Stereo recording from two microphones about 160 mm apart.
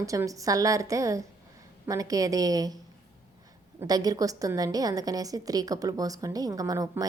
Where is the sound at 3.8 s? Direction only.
25° right (ahead or behind).